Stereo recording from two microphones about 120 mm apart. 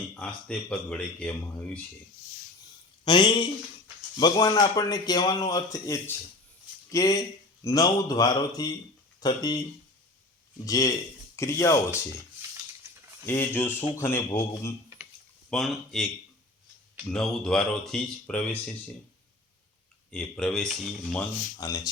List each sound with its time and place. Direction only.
0.1 s speech: 5° left (ahead or behind)
3.0 s speech: 40° left (ahead or behind)
10.7 s speech: 30° left (ahead or behind)
12.8 s cutlery: 20° right (ahead or behind)
13.2 s speech: 20° left (ahead or behind)
15.4 s speech: 5° left (ahead or behind)
17.1 s speech: 5° left (ahead or behind)
20.1 s speech: 5° left (ahead or behind)
21.6 s speech: 30° left (ahead or behind)